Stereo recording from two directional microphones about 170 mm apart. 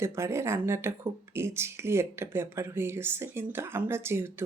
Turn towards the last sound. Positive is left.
turn(degrees=-15)  # may be behind; listen again after turning